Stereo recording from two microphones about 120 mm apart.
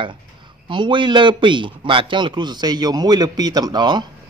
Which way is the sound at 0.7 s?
40° right (ahead or behind).